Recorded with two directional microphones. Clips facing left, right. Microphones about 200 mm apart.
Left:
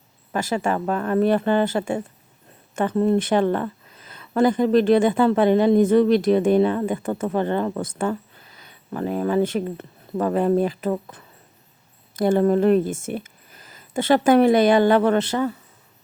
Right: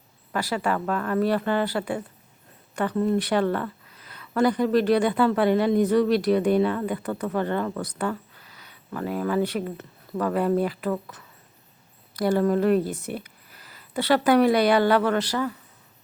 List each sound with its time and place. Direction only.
0.3 s speech: 25° left (ahead or behind)
13.1 s a sound: 20° left (ahead or behind)
14.0 s speech: 25° left (ahead or behind)